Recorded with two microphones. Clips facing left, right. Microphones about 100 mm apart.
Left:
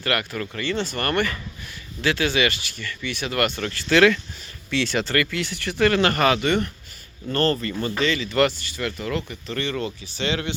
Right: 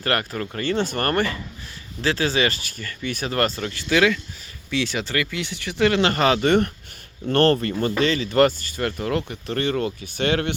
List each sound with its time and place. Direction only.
0.0 s speech: 35° right (ahead or behind)
3.6 s speech: 15° right (ahead or behind)
6.4 s speech: 50° right (ahead or behind)
7.8 s speech: 45° right (ahead or behind)